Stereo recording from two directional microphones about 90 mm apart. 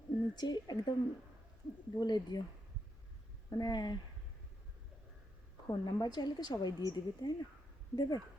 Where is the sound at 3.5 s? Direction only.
45° left (ahead or behind).